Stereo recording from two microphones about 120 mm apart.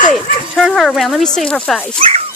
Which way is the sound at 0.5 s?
Centre (ahead or behind).